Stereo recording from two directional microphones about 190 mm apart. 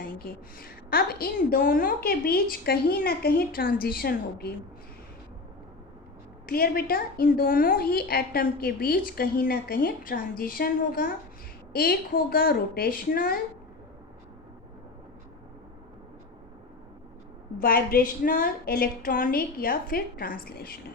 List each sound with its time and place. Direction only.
0.3 s a woman's voice: 50° left (ahead or behind)
6.4 s a woman's voice: 50° left (ahead or behind)
17.6 s a woman's voice: 50° left (ahead or behind)